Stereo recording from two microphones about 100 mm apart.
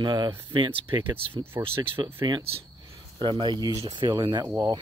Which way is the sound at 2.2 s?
50° right (ahead or behind).